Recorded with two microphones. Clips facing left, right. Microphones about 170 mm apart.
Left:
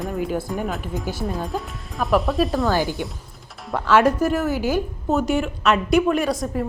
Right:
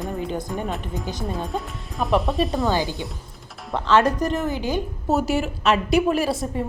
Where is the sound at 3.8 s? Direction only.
10° left (ahead or behind).